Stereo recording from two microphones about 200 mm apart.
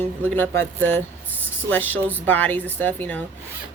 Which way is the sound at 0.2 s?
10° left (ahead or behind).